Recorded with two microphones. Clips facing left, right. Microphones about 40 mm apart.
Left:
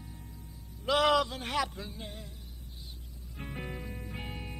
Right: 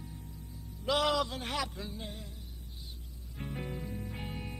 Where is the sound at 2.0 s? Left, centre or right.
Left.